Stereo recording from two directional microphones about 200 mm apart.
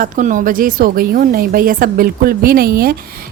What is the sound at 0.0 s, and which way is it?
A woman's voice, 40° right (ahead or behind).